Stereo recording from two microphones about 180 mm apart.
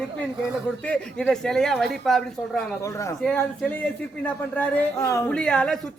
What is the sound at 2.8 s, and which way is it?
Speech, 15° left (ahead or behind).